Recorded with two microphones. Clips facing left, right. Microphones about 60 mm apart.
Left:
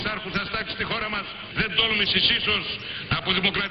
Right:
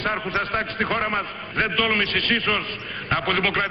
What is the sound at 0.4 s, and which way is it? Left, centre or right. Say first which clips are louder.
Speech: right 5 dB; right.